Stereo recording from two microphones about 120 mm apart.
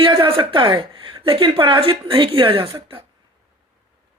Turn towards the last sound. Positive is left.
turn(degrees=-50)  # may be behind; listen again after turning